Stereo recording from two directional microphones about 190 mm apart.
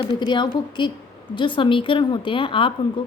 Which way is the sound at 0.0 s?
25° left (ahead or behind).